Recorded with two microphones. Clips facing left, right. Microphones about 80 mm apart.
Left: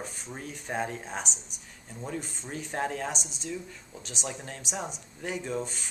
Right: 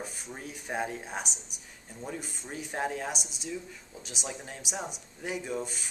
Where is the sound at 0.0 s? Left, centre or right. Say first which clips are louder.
Left 1 dB; centre.